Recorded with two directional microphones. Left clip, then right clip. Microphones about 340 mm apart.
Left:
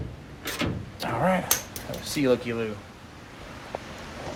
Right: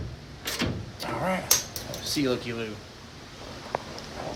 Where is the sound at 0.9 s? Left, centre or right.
Left.